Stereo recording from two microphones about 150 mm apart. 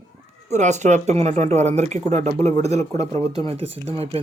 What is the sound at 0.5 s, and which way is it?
Speech, 50° right (ahead or behind).